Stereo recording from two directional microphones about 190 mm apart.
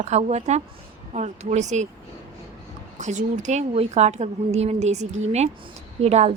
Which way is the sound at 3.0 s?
40° right (ahead or behind).